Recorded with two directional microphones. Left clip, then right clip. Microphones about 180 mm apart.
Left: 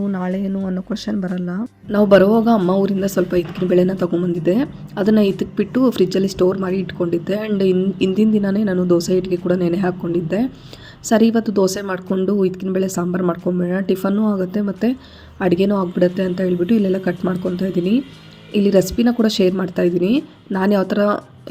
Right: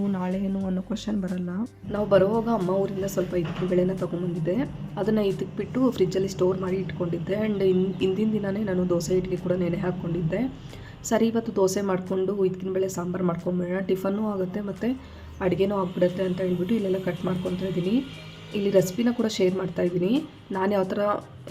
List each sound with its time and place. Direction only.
0.1 s speech: 25° left (ahead or behind)